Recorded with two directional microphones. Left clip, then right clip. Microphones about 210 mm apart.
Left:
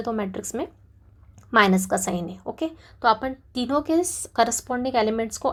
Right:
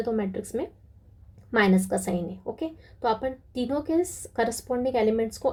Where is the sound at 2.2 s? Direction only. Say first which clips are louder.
Left 1 dB; 35° left (ahead or behind).